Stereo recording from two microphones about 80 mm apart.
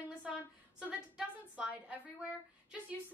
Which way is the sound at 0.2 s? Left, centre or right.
Centre.